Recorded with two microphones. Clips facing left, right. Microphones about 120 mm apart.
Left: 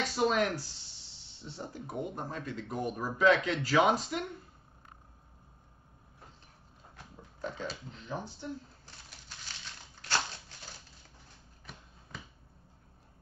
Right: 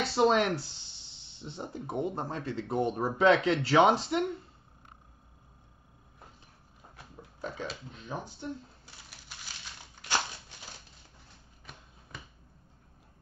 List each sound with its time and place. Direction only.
0.0 s speech: 30° right (ahead or behind)
7.0 s pig: 10° right (ahead or behind)
7.9 s speech: 15° right (ahead or behind)